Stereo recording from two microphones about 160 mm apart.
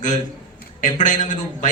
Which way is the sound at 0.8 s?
50° left (ahead or behind).